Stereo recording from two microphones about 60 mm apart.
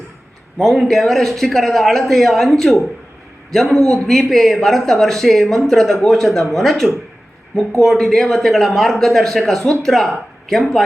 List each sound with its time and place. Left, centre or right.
0.6 s speech: centre